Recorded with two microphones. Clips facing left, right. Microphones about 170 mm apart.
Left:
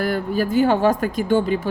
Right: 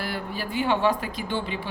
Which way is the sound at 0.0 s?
45° left (ahead or behind).